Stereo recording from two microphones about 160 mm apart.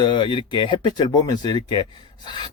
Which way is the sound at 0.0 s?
30° left (ahead or behind).